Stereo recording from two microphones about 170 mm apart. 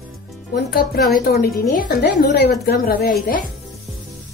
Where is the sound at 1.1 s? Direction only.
60° left (ahead or behind).